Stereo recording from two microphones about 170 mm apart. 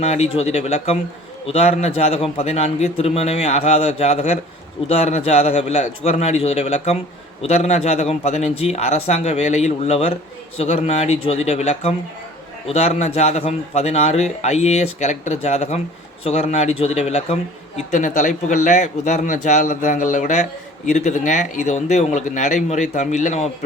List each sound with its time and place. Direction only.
0.0 s speech: 40° left (ahead or behind)